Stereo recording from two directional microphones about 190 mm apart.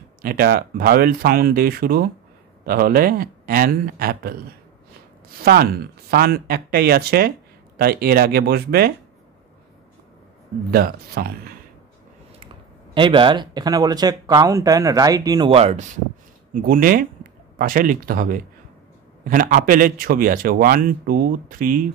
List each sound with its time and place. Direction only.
0.2 s speech: 50° right (ahead or behind)
5.4 s speech: 55° right (ahead or behind)
10.7 s speech: 55° right (ahead or behind)
12.9 s speech: 25° right (ahead or behind)
16.5 s speech: 50° right (ahead or behind)